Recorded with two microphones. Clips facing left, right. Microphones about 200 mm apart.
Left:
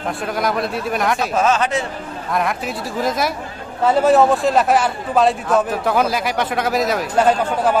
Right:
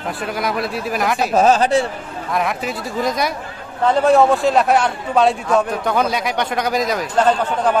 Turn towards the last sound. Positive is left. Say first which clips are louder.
# even
turn(degrees=10)  # may be behind; listen again after turning